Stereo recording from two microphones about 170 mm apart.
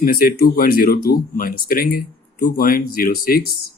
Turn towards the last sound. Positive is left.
turn(degrees=60)  # may be behind; listen again after turning